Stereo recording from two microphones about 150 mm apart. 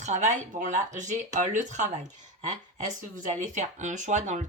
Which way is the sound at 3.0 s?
55° right (ahead or behind).